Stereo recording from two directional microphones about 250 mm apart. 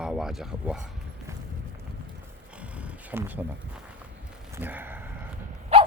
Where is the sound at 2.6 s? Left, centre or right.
Centre.